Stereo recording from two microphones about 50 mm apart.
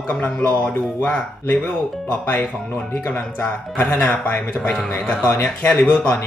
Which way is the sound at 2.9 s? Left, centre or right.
Left.